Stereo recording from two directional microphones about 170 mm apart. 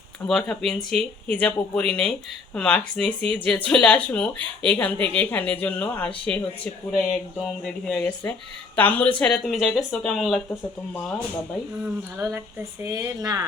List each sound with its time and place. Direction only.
0.3 s speech: centre (ahead or behind)
12.8 s speech: 20° right (ahead or behind)